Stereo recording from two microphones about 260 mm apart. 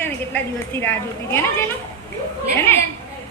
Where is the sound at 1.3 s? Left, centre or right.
Centre.